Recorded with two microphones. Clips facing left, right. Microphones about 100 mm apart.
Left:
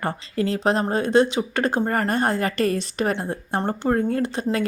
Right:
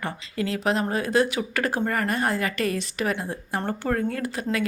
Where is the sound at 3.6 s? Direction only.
25° left (ahead or behind).